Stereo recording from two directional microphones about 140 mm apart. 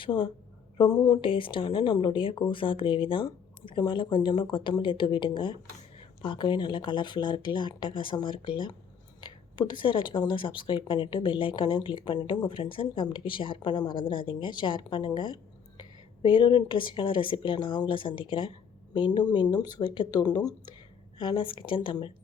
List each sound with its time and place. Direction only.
0.0 s speech: 40° left (ahead or behind)